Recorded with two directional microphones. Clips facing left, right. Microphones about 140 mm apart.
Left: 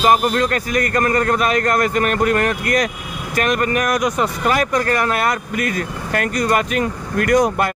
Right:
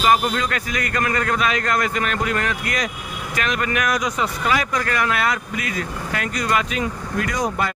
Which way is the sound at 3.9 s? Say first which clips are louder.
Left 4 dB; 55° left (ahead or behind).